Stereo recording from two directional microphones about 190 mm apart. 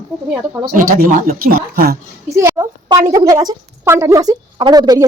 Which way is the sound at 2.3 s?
15° right (ahead or behind).